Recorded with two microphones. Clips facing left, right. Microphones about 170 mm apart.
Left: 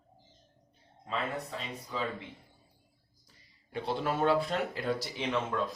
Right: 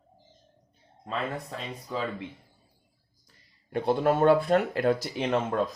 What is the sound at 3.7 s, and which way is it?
Speech, 50° right (ahead or behind).